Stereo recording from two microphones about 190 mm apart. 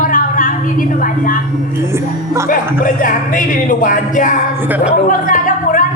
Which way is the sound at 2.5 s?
45° left (ahead or behind).